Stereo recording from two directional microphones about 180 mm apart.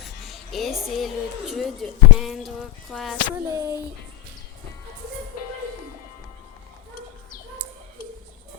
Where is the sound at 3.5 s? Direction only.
20° right (ahead or behind).